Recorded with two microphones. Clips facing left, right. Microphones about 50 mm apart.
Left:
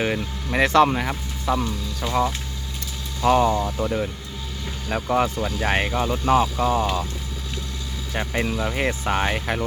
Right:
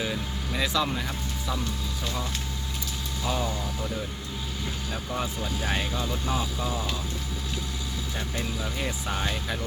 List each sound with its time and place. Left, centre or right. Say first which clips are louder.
0.0 s speech: left 6 dB; left
3.2 s speech: left 12 dB; left
3.8 s speech: left 7 dB; left
8.1 s speech: left 10 dB; left